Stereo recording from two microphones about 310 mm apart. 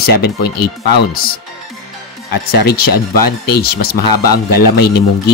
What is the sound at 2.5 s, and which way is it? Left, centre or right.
Speech, left.